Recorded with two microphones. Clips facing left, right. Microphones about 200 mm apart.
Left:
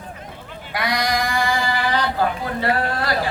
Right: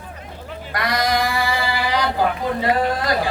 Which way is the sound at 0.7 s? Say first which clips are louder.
Right 1 dB; centre (ahead or behind).